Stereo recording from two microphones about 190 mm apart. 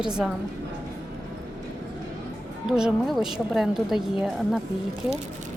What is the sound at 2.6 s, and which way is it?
Speech, centre (ahead or behind).